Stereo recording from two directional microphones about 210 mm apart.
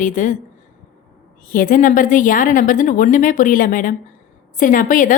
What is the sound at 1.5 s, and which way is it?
A woman's voice, 40° left (ahead or behind).